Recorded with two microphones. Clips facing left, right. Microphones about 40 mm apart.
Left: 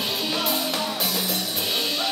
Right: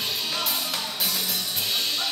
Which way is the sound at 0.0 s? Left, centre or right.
Centre.